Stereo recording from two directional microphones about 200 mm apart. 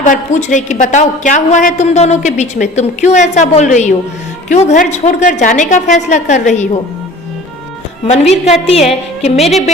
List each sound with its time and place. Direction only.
0.0 s a woman's voice: 40° left (ahead or behind)
8.0 s a woman's voice: 35° left (ahead or behind)